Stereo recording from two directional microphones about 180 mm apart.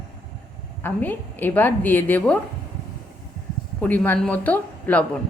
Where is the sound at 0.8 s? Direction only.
10° left (ahead or behind).